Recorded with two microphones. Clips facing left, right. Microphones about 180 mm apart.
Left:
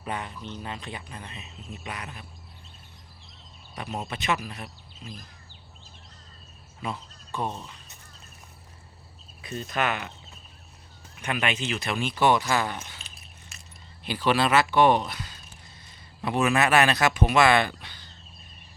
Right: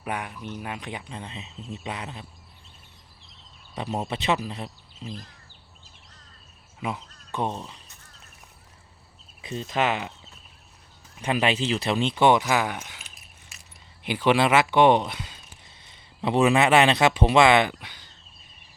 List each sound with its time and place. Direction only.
0.0 s speech: 10° right (ahead or behind)
3.8 s speech: 30° right (ahead or behind)
6.7 s speech: 15° right (ahead or behind)
9.4 s speech: 25° right (ahead or behind)
11.2 s speech: 30° right (ahead or behind)
16.2 s speech: 25° right (ahead or behind)